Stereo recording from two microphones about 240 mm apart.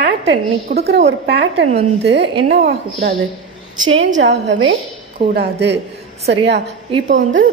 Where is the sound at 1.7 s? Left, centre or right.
Right.